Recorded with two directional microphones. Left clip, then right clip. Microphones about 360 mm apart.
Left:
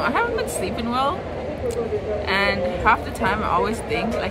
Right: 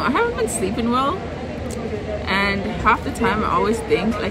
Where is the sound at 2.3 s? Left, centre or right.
Centre.